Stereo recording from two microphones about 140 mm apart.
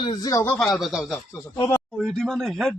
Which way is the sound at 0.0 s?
30° left (ahead or behind).